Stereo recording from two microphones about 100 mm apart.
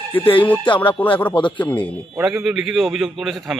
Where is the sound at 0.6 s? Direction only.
55° left (ahead or behind).